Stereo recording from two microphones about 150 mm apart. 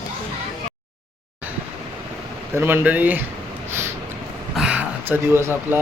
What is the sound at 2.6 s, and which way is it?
Speech, 15° right (ahead or behind).